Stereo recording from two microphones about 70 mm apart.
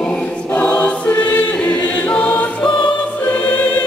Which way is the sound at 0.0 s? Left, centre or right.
Centre.